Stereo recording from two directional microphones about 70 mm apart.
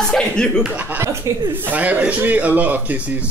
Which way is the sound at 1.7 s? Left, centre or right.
Right.